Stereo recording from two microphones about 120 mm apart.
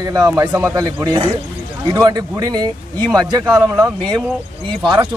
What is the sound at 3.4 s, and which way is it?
Speech, 20° right (ahead or behind).